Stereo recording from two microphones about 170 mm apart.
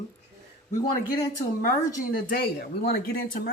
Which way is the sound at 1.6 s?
55° left (ahead or behind).